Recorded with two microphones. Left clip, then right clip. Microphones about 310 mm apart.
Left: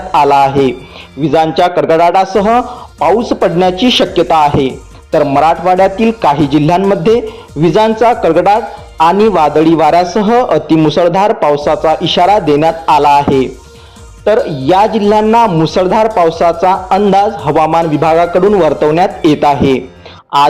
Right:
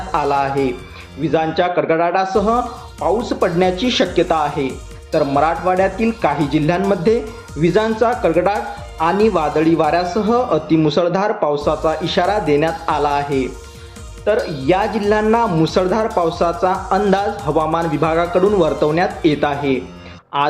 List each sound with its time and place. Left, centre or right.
0.1 s speech: left